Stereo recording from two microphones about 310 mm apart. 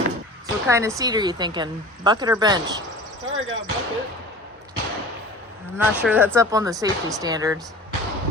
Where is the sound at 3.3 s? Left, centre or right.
Right.